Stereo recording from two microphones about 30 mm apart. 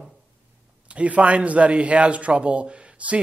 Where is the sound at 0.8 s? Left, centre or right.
Right.